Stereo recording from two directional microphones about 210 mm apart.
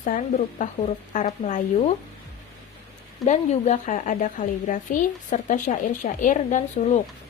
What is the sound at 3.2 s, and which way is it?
Speech, 35° left (ahead or behind).